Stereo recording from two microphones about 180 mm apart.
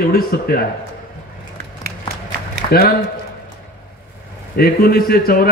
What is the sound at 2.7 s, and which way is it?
Speech, 60° left (ahead or behind).